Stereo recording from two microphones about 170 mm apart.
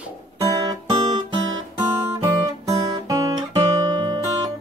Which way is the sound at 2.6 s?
20° right (ahead or behind).